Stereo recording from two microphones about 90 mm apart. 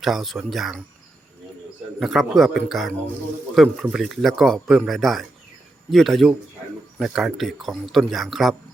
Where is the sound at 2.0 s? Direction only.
Centre (ahead or behind).